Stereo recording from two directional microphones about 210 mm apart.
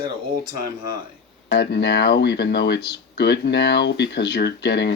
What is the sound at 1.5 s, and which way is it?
Speech, 50° left (ahead or behind).